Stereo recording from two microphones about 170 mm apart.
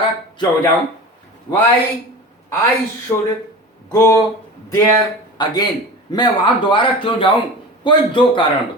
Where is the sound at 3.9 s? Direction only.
15° left (ahead or behind).